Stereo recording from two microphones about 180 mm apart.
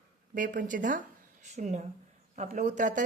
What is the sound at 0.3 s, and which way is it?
A woman's voice, 45° right (ahead or behind).